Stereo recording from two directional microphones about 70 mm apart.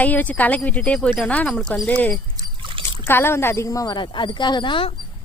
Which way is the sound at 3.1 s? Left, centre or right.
Left.